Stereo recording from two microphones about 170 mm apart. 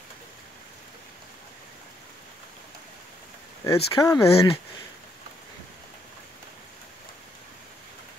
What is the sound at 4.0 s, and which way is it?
Speech, 15° left (ahead or behind).